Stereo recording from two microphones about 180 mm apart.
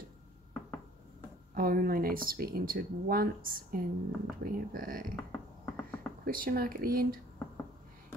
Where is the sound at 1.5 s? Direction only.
55° right (ahead or behind).